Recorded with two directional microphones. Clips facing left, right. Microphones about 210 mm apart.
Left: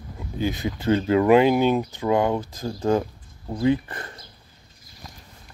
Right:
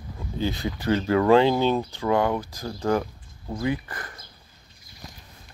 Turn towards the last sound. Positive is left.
turn(degrees=25)  # may be behind; listen again after turning